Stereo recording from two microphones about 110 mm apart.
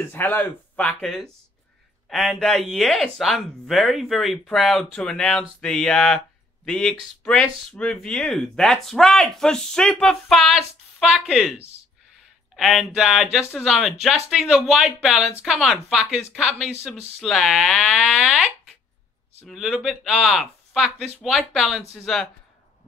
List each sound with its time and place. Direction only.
0.1 s speech: 20° left (ahead or behind)
1.0 s speech: 5° left (ahead or behind)
2.3 s speech: centre (ahead or behind)
12.5 s speech: centre (ahead or behind)